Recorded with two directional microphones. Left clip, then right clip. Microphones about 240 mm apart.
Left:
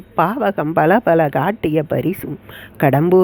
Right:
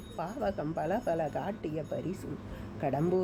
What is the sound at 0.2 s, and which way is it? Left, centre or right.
Speech, left.